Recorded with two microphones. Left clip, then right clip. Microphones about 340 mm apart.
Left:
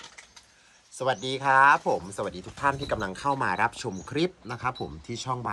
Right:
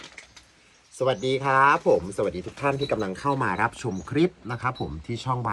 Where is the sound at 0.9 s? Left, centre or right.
Left.